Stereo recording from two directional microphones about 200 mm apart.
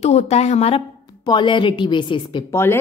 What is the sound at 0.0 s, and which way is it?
Speech, 30° left (ahead or behind).